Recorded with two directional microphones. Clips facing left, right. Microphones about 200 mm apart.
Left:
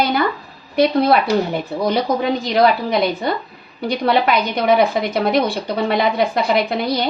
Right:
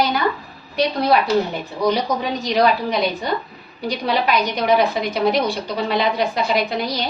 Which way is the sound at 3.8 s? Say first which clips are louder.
Left 4 dB; 55° left (ahead or behind).